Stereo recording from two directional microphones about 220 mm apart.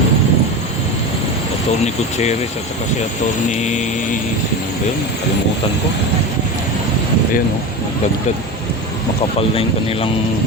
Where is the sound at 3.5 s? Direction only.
30° left (ahead or behind).